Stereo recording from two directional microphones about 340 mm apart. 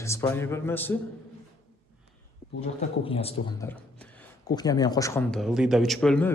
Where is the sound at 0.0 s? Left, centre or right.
Centre.